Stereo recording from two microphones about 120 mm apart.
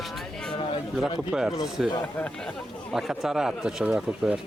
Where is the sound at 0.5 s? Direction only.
50° left (ahead or behind).